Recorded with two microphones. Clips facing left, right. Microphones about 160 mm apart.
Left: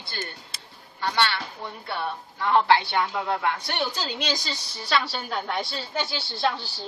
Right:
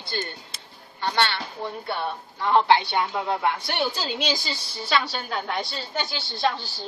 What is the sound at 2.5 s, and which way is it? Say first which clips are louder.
Speech: right 1 dB; 20° right (ahead or behind).